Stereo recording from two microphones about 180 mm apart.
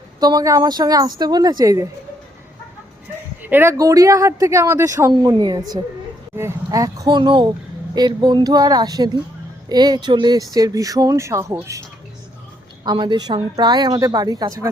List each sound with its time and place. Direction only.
0.2 s speech: 20° right (ahead or behind)
3.4 s speech: 10° right (ahead or behind)